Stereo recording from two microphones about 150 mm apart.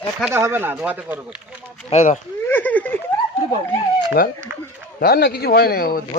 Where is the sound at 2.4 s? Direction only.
10° left (ahead or behind).